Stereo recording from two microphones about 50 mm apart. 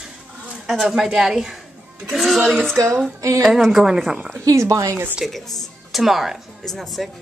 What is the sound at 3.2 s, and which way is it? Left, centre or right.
Speech, right.